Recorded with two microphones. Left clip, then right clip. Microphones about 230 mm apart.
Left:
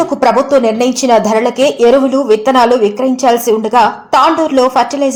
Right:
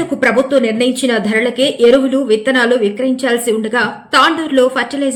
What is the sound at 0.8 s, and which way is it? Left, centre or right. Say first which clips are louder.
A woman's voice: left 6 dB; left.